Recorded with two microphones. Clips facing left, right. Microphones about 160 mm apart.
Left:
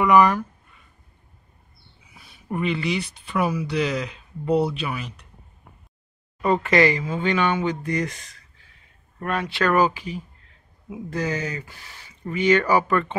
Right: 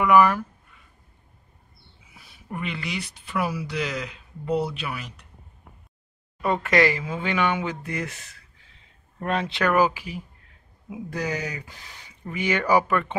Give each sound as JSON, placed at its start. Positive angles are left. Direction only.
{"t": 0.0, "sound": "speech", "side_deg": -5}
{"t": 2.5, "sound": "speech", "side_deg": 0}
{"t": 6.4, "sound": "speech", "side_deg": 0}
{"t": 9.2, "sound": "speech", "side_deg": -25}